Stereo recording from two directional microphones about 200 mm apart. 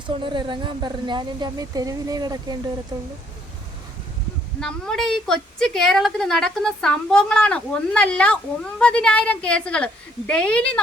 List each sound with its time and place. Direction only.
0.1 s a woman's voice: 25° right (ahead or behind)
4.6 s a woman's voice: 5° left (ahead or behind)